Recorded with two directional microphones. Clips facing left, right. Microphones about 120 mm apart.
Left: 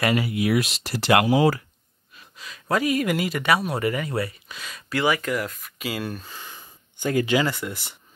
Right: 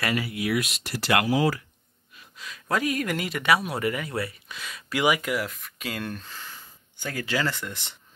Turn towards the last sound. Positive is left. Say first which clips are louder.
# left 4 dB
turn(degrees=10)  # may be behind; listen again after turning